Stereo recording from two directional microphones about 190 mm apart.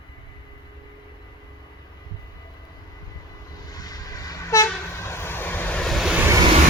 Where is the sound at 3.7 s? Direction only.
20° left (ahead or behind); by 6.4 s 10° right (ahead or behind).